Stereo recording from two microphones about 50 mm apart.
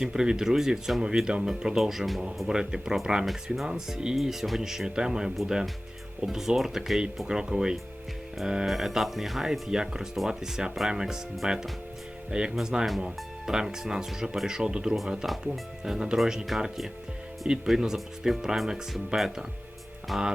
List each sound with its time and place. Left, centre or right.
0.0 s speech: centre
2.5 s speech: centre
15.3 s speech: centre